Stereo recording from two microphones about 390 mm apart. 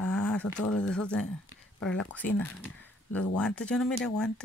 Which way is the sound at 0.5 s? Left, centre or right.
Left.